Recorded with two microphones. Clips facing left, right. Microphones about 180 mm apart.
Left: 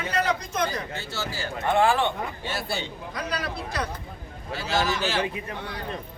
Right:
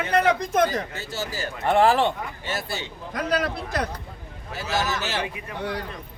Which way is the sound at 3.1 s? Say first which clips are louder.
Right 7 dB; 50° right (ahead or behind).